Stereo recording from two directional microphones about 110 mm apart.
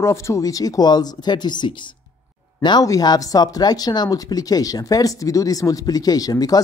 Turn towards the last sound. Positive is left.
turn(degrees=35)  # may be behind; listen again after turning